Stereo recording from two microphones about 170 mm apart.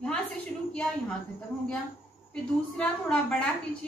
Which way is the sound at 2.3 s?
5° left (ahead or behind).